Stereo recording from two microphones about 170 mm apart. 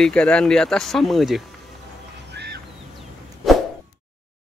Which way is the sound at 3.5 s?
Centre (ahead or behind).